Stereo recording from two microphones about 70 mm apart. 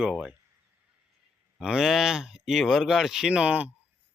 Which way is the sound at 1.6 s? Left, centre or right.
Centre.